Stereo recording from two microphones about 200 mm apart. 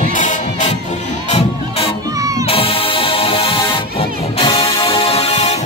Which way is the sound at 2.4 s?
30° left (ahead or behind).